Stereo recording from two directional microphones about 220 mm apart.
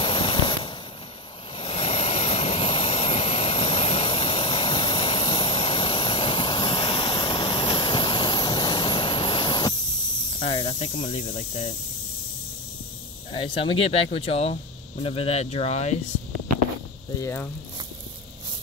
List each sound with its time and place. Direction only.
0.0 s firecracker: 20° left (ahead or behind)
1.6 s vehicle: 30° left (ahead or behind)
10.4 s speech: 25° left (ahead or behind)
13.3 s speech: 25° left (ahead or behind)
17.2 s speech: 10° left (ahead or behind)